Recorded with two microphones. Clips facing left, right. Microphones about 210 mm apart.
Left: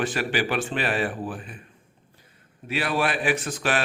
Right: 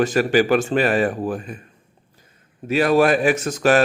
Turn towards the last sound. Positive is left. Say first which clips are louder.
# right 8 dB
turn(degrees=-40)  # may be behind; listen again after turning